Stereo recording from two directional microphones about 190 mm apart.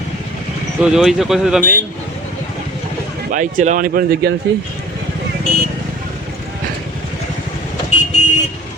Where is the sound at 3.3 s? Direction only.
40° right (ahead or behind).